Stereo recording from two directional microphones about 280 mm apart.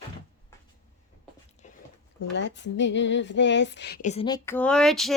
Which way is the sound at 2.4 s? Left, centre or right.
Left.